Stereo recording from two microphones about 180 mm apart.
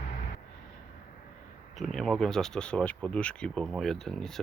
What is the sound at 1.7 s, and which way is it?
Speech, centre (ahead or behind).